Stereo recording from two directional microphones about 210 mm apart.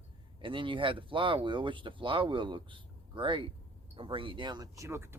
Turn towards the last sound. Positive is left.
turn(degrees=-10)  # may be behind; listen again after turning